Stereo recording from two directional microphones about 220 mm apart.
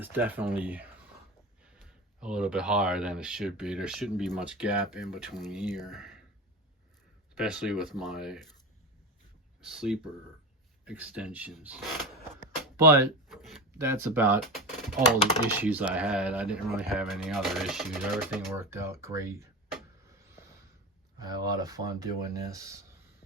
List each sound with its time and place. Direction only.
0.0 s speech: 10° right (ahead or behind)
7.3 s speech: 5° right (ahead or behind)
9.6 s speech: 5° right (ahead or behind)
13.2 s a sound: centre (ahead or behind)
13.7 s speech: 10° right (ahead or behind)
21.2 s speech: 20° right (ahead or behind)